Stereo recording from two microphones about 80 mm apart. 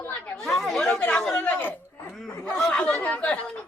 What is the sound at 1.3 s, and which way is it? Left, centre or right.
Speech, left.